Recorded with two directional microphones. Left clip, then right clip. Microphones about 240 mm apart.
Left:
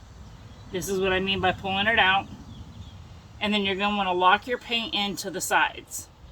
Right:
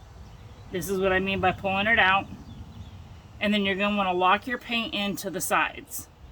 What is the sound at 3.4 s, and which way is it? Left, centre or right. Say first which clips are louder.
Speech: even; right.